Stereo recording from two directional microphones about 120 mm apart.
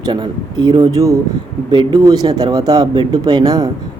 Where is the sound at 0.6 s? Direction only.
40° right (ahead or behind).